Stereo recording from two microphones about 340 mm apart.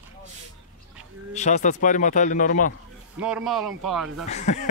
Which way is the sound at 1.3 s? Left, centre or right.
Left.